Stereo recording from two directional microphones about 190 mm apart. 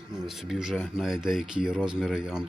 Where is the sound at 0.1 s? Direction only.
Centre (ahead or behind).